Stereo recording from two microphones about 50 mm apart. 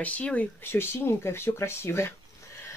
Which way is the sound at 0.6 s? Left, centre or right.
Left.